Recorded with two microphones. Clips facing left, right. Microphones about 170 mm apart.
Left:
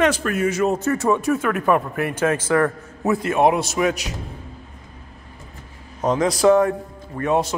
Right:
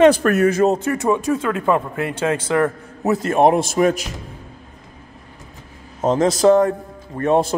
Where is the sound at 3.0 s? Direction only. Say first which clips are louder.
Right 2 dB; 40° right (ahead or behind).